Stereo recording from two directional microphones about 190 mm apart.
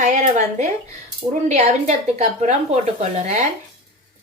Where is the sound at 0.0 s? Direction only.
40° right (ahead or behind).